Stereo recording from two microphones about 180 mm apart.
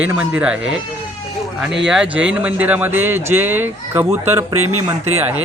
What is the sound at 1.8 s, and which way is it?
A man's voice, 5° right (ahead or behind).